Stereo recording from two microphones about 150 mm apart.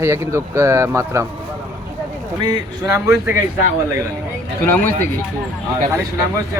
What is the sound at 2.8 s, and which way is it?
Speech, 15° right (ahead or behind).